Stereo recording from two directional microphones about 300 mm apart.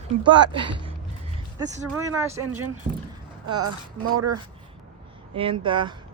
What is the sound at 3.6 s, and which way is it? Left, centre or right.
Speech, right.